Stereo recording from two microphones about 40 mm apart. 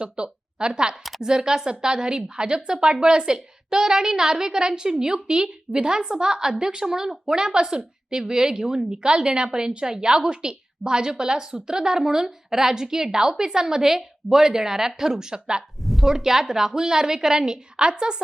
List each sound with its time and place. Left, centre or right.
0.0 s a woman's voice: right
15.8 s a sound: centre
16.0 s a woman's voice: centre